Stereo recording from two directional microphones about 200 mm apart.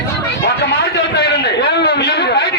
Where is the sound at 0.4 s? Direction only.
55° left (ahead or behind).